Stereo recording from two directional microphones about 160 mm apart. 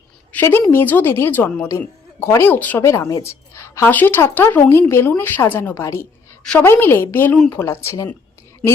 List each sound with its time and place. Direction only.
0.3 s a woman's voice: 15° left (ahead or behind)
6.4 s a woman's voice: 5° left (ahead or behind)